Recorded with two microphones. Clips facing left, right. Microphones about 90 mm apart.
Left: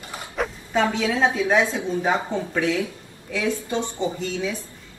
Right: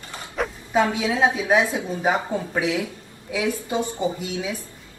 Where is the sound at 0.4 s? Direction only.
10° right (ahead or behind).